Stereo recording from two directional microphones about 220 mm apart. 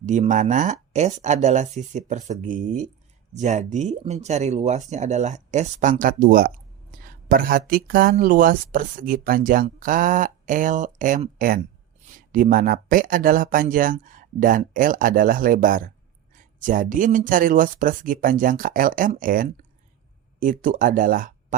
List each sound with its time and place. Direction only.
0.0 s speech: 35° right (ahead or behind)